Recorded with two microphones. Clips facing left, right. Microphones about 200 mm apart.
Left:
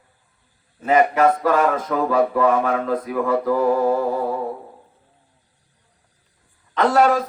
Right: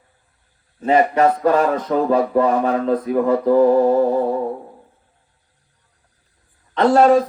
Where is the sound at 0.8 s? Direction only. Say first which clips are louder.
Right 1 dB; 35° right (ahead or behind).